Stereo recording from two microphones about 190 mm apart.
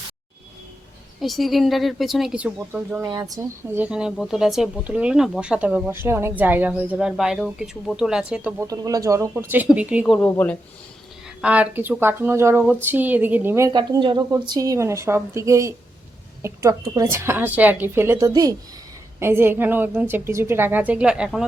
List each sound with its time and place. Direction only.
1.2 s speech: centre (ahead or behind)
3.1 s speech: 20° right (ahead or behind)
8.6 s speech: 20° right (ahead or behind)
10.2 s speech: 10° left (ahead or behind)
11.3 s speech: 5° right (ahead or behind)